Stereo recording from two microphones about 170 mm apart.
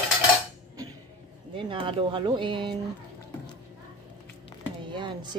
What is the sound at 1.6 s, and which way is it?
A woman's voice, 30° right (ahead or behind).